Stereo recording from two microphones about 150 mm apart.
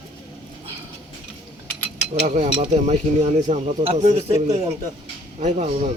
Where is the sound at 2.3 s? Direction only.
55° right (ahead or behind).